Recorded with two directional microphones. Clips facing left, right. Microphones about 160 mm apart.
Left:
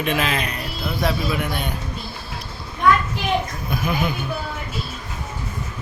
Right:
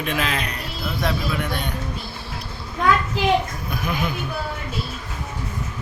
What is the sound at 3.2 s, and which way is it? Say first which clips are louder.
Speech: right 5 dB; 90° right.